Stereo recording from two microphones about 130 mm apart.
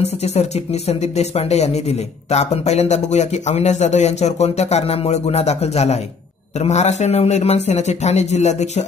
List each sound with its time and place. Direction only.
0.0 s speech: 55° left (ahead or behind)